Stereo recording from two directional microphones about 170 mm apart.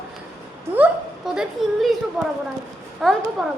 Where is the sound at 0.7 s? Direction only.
5° right (ahead or behind).